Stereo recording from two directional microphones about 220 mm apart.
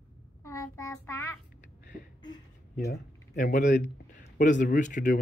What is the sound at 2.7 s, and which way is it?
Speech, 45° left (ahead or behind).